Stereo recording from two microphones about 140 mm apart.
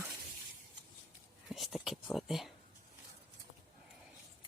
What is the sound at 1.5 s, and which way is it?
Speech, centre (ahead or behind).